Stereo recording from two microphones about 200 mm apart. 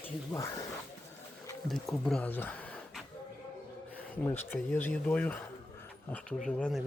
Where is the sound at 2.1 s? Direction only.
5° left (ahead or behind).